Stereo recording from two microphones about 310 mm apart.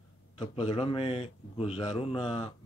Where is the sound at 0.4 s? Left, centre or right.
Centre.